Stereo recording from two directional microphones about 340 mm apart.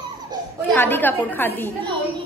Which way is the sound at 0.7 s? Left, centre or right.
Centre.